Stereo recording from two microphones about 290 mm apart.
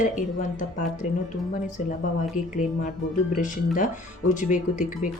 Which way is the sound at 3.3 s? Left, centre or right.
Left.